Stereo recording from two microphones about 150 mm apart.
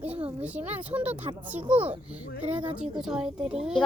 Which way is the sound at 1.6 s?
40° right (ahead or behind).